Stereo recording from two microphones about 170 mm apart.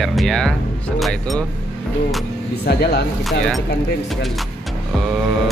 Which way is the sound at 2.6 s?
70° left (ahead or behind).